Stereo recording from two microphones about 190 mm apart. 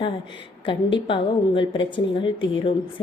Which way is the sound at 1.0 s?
25° left (ahead or behind).